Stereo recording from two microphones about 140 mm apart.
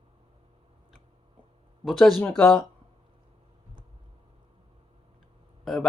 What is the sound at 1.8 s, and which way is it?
Speech, centre (ahead or behind).